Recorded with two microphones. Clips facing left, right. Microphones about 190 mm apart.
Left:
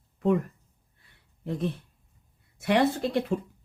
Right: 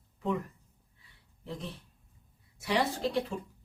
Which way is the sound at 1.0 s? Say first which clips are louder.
Left 8 dB; 55° left (ahead or behind).